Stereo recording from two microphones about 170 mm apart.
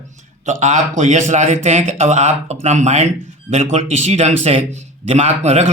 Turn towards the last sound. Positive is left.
turn(degrees=-40)  # may be behind; listen again after turning